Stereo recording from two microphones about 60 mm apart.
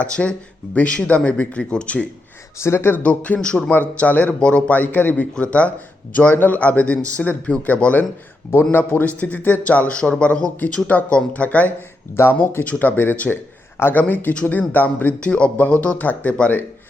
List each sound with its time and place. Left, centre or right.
0.0 s speech: left
2.6 s speech: left
3.0 s speech: left
4.4 s speech: centre
4.7 s speech: left
12.1 s speech: left